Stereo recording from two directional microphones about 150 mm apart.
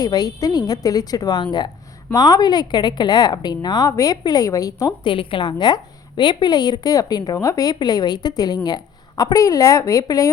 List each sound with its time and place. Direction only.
0.0 s speech: 25° left (ahead or behind)